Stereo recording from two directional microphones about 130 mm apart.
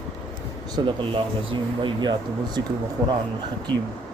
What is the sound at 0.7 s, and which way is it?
Speech, 40° right (ahead or behind).